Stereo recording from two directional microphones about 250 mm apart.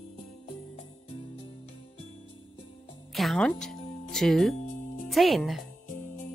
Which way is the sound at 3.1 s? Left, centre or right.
Centre.